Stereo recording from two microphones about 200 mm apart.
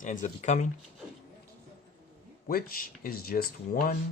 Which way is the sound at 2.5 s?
45° left (ahead or behind).